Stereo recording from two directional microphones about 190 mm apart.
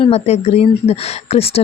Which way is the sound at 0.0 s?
35° left (ahead or behind).